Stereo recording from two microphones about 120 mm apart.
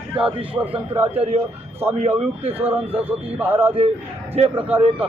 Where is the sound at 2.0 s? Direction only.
55° right (ahead or behind).